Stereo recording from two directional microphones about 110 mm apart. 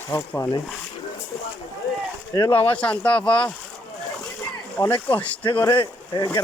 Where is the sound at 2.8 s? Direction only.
10° left (ahead or behind).